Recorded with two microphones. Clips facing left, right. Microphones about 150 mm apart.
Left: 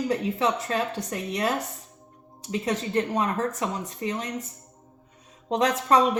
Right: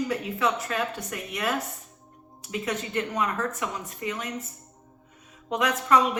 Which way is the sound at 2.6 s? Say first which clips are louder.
Left 4 dB; 35° left (ahead or behind).